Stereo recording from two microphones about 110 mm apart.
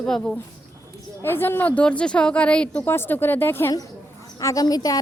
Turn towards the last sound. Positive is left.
turn(degrees=35)  # may be behind; listen again after turning